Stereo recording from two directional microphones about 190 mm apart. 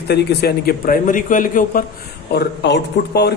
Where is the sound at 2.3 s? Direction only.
60° left (ahead or behind).